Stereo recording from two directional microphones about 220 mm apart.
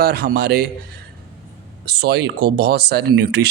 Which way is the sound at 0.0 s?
45° right (ahead or behind).